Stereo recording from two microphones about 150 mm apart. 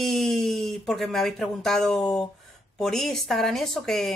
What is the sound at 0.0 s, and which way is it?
Speech, centre (ahead or behind).